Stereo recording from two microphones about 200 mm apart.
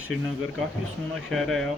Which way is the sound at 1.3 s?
Centre (ahead or behind).